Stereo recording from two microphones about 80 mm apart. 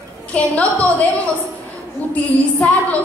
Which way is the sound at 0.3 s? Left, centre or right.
Centre.